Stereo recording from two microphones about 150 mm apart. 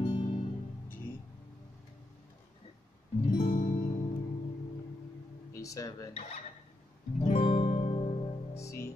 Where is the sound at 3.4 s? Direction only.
50° left (ahead or behind).